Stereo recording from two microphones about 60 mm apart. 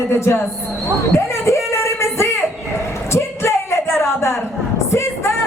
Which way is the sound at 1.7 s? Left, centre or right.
Left.